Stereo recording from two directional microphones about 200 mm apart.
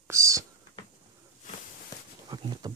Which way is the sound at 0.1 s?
15° right (ahead or behind).